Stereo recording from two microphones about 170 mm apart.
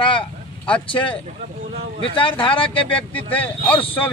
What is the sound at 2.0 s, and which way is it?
Speech, 30° left (ahead or behind).